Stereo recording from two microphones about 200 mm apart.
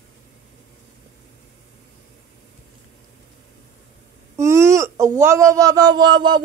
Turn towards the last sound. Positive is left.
turn(degrees=-20)  # may be behind; listen again after turning